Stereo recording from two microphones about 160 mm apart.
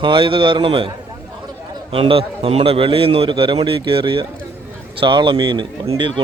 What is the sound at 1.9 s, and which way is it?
A man's voice, 35° right (ahead or behind).